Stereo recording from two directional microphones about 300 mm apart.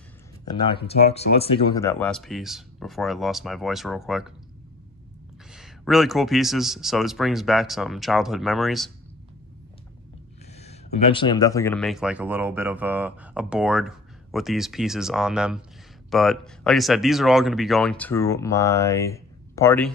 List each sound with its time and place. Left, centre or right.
0.5 s speech: centre
5.5 s speech: centre
10.6 s speech: centre